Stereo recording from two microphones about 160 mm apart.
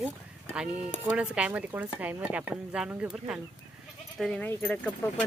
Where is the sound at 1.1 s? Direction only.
10° right (ahead or behind); by 4.9 s 10° left (ahead or behind).